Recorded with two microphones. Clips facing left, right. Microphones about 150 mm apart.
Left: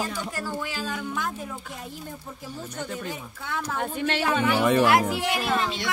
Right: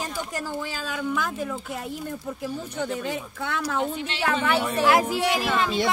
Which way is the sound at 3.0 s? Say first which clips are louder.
Right 5 dB; 75° right (ahead or behind).